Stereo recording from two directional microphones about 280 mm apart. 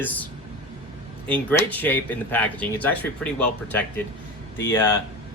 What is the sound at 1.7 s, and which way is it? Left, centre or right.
Speech, centre.